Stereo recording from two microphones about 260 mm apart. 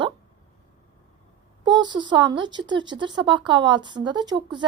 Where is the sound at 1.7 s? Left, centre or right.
Centre.